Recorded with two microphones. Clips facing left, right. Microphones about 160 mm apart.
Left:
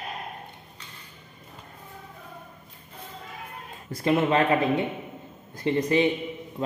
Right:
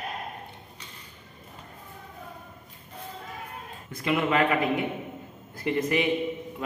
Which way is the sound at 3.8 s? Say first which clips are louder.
Left 3 dB; 35° left (ahead or behind).